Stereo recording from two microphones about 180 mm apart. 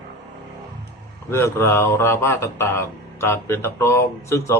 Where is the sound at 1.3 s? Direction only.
15° left (ahead or behind).